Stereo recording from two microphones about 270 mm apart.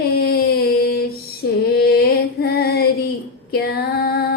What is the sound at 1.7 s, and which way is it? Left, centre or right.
Music, left.